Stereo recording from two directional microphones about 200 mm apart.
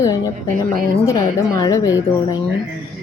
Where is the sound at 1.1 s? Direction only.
20° left (ahead or behind).